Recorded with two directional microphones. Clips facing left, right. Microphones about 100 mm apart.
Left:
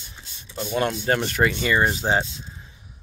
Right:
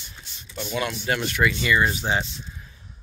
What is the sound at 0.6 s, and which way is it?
Speech, 45° left (ahead or behind).